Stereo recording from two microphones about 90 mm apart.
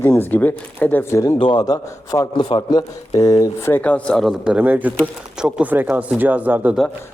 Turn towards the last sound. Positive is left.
turn(degrees=-20)  # may be behind; listen again after turning